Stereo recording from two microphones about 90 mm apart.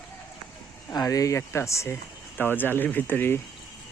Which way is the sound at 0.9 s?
40° left (ahead or behind).